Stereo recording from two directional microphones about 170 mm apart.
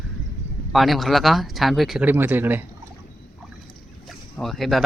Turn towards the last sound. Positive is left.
turn(degrees=0)  # may be behind; listen again after turning